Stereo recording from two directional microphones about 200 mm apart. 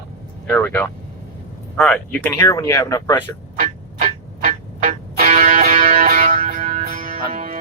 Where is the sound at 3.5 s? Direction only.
40° right (ahead or behind).